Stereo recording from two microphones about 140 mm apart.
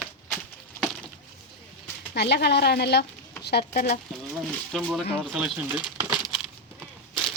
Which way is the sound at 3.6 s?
60° left (ahead or behind).